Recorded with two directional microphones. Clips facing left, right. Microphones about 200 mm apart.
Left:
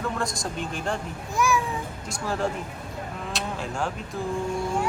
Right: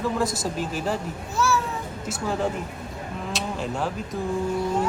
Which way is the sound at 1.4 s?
15° left (ahead or behind).